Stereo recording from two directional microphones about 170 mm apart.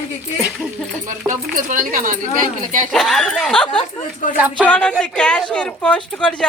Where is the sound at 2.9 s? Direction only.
5° left (ahead or behind).